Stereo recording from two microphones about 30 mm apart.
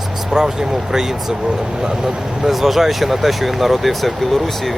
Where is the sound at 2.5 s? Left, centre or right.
Centre.